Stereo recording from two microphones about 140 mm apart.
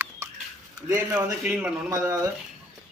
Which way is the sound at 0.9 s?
10° right (ahead or behind).